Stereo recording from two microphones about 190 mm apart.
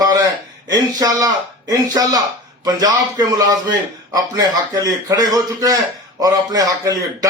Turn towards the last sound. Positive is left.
turn(degrees=-20)  # may be behind; listen again after turning